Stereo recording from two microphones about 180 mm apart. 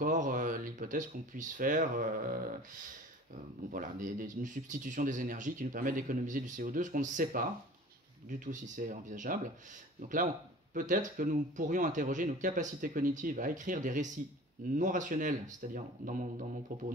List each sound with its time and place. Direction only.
0.0 s speech: 45° right (ahead or behind)
3.7 s speech: 45° right (ahead or behind)
8.5 s speech: 45° right (ahead or behind)